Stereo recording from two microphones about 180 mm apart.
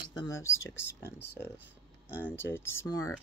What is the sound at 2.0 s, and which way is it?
Speech, 10° left (ahead or behind).